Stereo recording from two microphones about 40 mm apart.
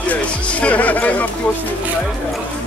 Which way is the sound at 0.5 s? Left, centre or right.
Left.